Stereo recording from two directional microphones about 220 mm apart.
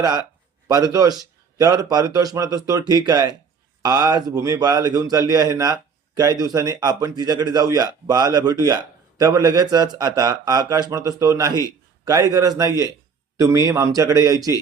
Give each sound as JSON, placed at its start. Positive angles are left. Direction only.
{"t": 0.0, "sound": "speech", "side_deg": -15}